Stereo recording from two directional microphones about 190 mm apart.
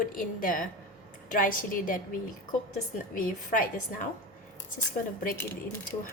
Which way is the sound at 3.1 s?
45° left (ahead or behind).